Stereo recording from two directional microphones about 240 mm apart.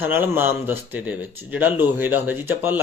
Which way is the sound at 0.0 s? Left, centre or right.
Centre.